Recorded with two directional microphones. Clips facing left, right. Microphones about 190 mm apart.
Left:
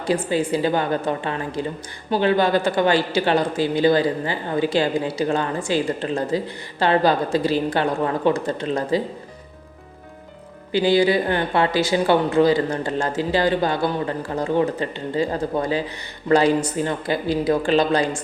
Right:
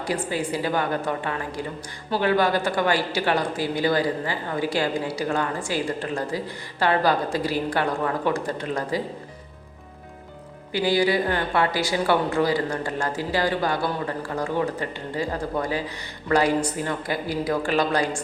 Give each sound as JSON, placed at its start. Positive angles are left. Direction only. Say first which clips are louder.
{"t": 0.0, "sound": "a woman's voice", "louder": "left 5 dB", "side_deg": 25}
{"t": 10.7, "sound": "a woman's voice", "louder": "left 4 dB", "side_deg": 25}